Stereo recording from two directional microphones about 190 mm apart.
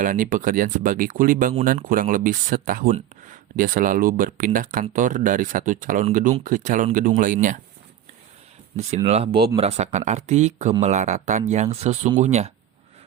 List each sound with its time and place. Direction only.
0.0 s speech: 45° right (ahead or behind)
9.0 s speech: 30° right (ahead or behind)